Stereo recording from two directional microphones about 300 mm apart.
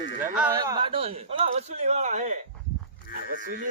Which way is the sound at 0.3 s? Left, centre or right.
Centre.